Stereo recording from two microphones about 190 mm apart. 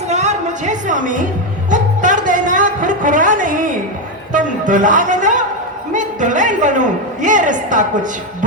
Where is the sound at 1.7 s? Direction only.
40° right (ahead or behind).